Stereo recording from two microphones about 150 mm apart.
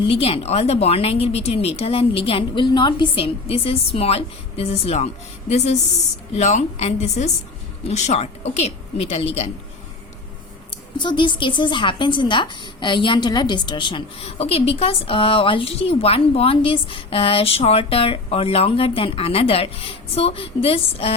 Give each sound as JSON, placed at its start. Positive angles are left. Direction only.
{"t": 0.1, "sound": "a woman's voice", "side_deg": 40}
{"t": 10.7, "sound": "a woman's voice", "side_deg": 30}